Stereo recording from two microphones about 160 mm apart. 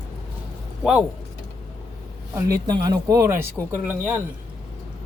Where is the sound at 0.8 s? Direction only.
5° right (ahead or behind).